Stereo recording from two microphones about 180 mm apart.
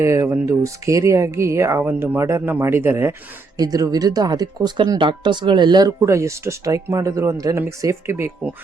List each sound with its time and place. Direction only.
0.0 s speech: 15° right (ahead or behind)